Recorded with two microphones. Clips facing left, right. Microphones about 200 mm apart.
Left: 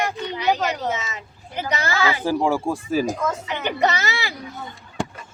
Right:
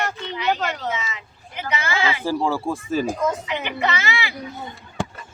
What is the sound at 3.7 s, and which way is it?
Speech, 40° left (ahead or behind).